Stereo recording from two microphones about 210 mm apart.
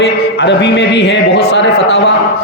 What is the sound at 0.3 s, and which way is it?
Music, 55° left (ahead or behind).